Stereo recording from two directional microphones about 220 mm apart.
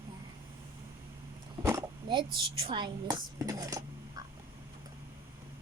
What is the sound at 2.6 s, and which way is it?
Speech, 20° right (ahead or behind).